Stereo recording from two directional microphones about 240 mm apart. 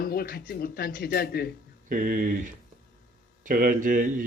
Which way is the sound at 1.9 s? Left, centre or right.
Right.